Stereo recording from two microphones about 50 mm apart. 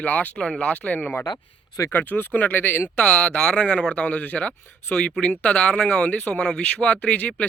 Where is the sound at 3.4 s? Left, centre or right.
Centre; by 5.0 s left.